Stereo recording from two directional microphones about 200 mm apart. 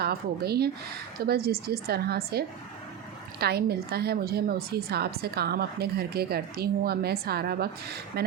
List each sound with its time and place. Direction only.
0.0 s a woman's voice: 50° right (ahead or behind)
3.4 s a woman's voice: 55° right (ahead or behind)